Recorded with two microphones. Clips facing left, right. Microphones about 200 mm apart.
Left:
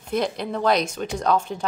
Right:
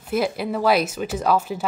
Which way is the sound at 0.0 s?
5° right (ahead or behind).